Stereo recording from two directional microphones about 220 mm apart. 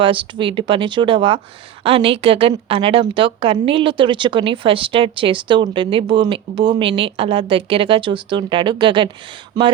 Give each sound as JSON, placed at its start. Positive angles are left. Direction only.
{"t": 0.0, "sound": "a woman's voice", "side_deg": -25}